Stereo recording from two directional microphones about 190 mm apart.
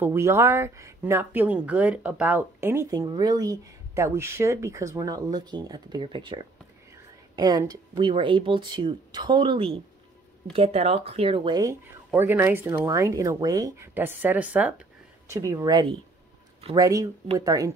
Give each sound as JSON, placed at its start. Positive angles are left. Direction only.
{"t": 0.0, "sound": "speech", "side_deg": -15}
{"t": 12.1, "sound": "speech", "side_deg": -10}
{"t": 15.3, "sound": "speech", "side_deg": -15}